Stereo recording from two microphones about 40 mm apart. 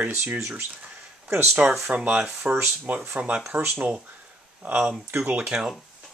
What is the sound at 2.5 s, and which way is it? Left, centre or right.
Speech, right.